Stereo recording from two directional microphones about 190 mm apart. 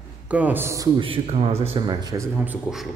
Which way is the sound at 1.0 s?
30° right (ahead or behind).